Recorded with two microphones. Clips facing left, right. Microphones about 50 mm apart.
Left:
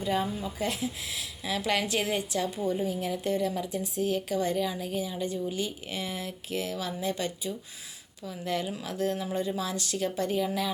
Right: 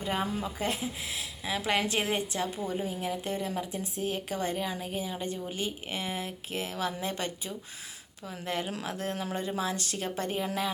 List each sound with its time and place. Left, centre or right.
0.0 s a woman's voice: right